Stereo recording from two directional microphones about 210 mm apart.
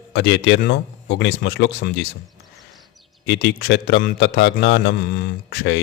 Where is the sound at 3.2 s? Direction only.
55° left (ahead or behind).